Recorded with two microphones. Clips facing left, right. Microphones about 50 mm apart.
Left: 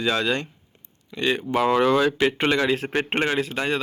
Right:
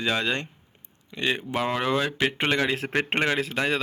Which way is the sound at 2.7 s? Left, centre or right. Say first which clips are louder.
Left 2 dB; right.